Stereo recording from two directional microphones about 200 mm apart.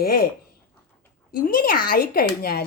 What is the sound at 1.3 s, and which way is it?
Speech, 45° left (ahead or behind).